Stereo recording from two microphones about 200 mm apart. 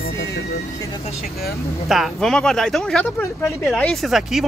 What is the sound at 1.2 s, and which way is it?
Speech, 50° left (ahead or behind).